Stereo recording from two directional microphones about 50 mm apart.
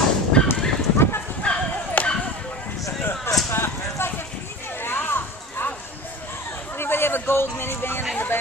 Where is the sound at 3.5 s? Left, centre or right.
Left.